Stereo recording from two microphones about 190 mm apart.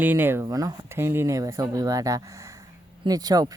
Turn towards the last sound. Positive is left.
turn(degrees=-20)  # may be behind; listen again after turning